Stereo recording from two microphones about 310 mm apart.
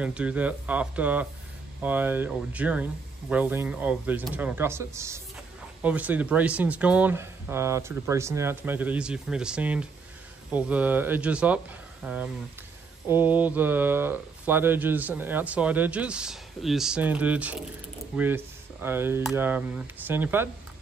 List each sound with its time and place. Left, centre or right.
0.0 s speech: centre